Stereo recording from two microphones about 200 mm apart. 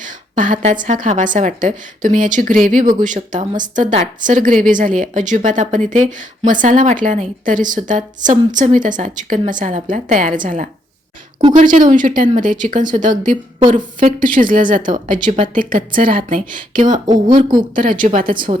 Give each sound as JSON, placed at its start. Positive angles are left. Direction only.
{"t": 0.0, "sound": "a woman's voice", "side_deg": -40}
{"t": 17.1, "sound": "speech", "side_deg": -20}
{"t": 18.0, "sound": "speech", "side_deg": -45}